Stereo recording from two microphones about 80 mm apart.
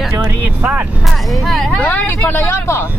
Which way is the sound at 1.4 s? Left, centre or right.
Centre.